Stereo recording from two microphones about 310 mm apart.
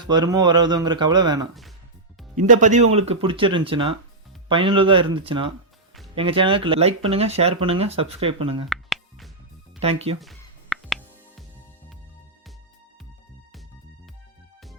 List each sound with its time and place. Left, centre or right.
0.0 s speech: centre
2.5 s speech: right
8.7 s music: centre
9.8 s speech: centre
10.2 s music: centre